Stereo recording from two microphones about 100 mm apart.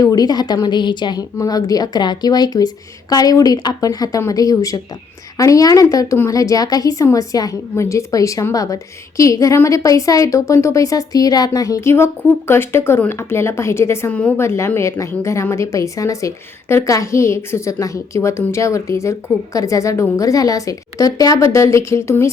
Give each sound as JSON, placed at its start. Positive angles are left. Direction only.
{"t": 0.0, "sound": "a woman's voice", "side_deg": 40}
{"t": 1.4, "sound": "a woman's voice", "side_deg": 40}
{"t": 14.1, "sound": "a woman's voice", "side_deg": 15}
{"t": 14.3, "sound": "a woman's voice", "side_deg": 25}